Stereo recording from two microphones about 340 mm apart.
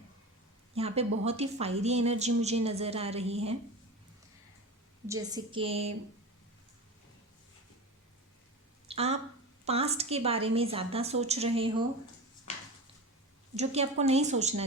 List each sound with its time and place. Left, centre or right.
0.7 s a woman's voice: centre
5.0 s a woman's voice: centre
8.9 s a sound: centre
9.6 s a woman's voice: centre
13.6 s a woman's voice: centre